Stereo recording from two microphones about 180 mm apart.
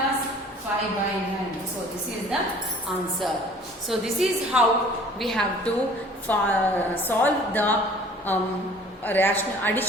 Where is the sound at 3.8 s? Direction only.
Centre (ahead or behind).